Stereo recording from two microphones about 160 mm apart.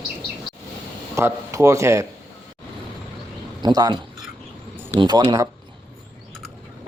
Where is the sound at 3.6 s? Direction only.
25° right (ahead or behind).